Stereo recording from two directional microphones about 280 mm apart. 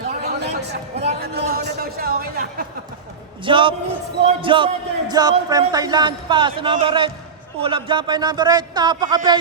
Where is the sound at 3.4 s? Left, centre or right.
Centre.